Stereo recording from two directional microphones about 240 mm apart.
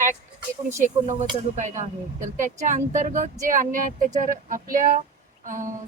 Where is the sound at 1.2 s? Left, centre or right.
Right.